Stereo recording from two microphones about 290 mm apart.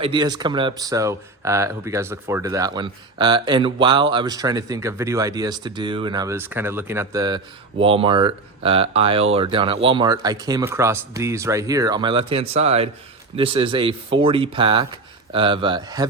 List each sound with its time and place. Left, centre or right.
0.0 s speech: centre